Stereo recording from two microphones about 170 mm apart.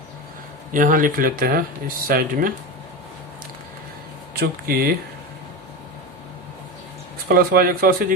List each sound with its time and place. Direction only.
0.7 s speech: 50° right (ahead or behind)
4.4 s speech: 65° right (ahead or behind)
7.3 s speech: 60° right (ahead or behind)